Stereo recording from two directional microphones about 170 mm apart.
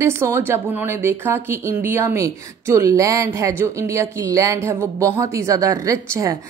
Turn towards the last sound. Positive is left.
turn(degrees=-20)  # may be behind; listen again after turning